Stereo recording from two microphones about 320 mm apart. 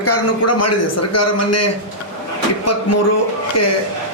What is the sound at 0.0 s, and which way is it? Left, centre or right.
A man's voice, left.